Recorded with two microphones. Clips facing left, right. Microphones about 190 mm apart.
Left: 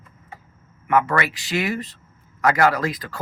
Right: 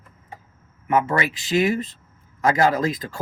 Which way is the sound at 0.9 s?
20° right (ahead or behind).